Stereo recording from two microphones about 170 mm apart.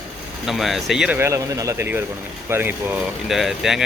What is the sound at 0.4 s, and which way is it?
A man's voice, centre (ahead or behind).